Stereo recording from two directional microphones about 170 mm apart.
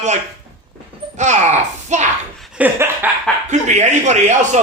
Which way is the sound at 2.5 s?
10° right (ahead or behind).